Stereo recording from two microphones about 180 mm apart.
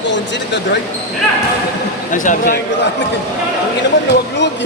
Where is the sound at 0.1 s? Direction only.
75° left (ahead or behind).